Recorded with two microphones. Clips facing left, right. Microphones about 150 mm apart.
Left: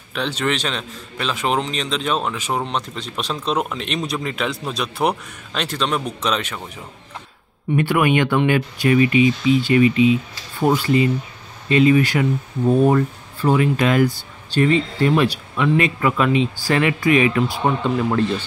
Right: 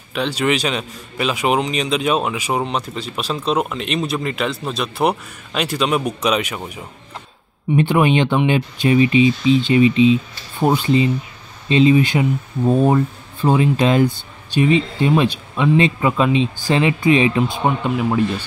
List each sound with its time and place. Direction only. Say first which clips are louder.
0.1 s a man's voice: right 3 dB; 5° right (ahead or behind)
7.7 s speech: right 2 dB; 25° right (ahead or behind)